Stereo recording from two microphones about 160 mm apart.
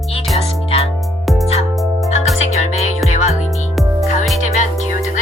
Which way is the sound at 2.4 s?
45° left (ahead or behind).